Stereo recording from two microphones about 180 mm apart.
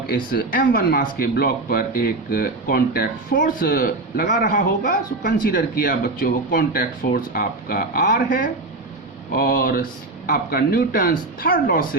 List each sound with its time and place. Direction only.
0.3 s speech: 55° left (ahead or behind)